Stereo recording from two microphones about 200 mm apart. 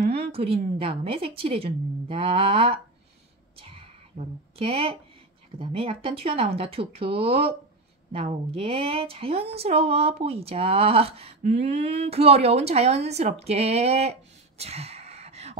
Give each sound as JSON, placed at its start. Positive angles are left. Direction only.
{"t": 0.0, "sound": "a woman's voice", "side_deg": -30}
{"t": 3.5, "sound": "whispering", "side_deg": -30}
{"t": 4.6, "sound": "a woman's voice", "side_deg": -30}
{"t": 14.6, "sound": "a sound", "side_deg": -30}